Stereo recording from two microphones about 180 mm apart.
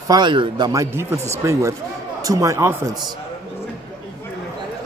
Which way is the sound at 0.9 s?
15° right (ahead or behind).